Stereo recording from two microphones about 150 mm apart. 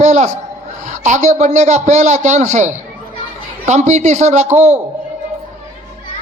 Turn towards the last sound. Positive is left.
turn(degrees=-50)  # may be behind; listen again after turning